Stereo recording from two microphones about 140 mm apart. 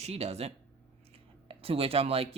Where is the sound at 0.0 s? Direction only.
50° right (ahead or behind).